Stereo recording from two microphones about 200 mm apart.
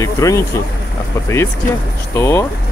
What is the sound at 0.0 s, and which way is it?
Speech, 15° left (ahead or behind).